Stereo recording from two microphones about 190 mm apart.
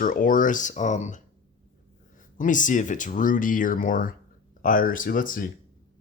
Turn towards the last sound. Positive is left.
turn(degrees=45)  # may be behind; listen again after turning